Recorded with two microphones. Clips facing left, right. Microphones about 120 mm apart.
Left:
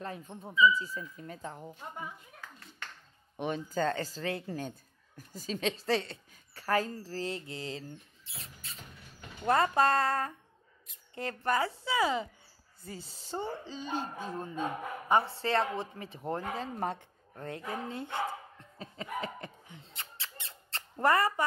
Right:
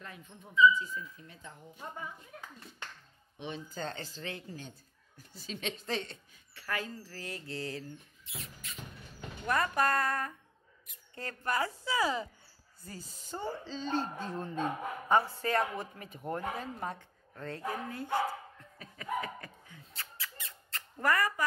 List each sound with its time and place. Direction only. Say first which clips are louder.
0.0 s speech: left 8 dB; 40° left (ahead or behind)
3.3 s speech: left 8 dB; 50° left (ahead or behind)
4.5 s speech: left 8 dB; 50° left (ahead or behind); by 7.8 s 20° left (ahead or behind)
8.3 s speech: right 3 dB; 30° left (ahead or behind)
13.5 s speech: right 2 dB; 15° left (ahead or behind)
15.1 s speech: left 1 dB; 30° left (ahead or behind)
18.8 s a sound: right 1 dB; 25° left (ahead or behind)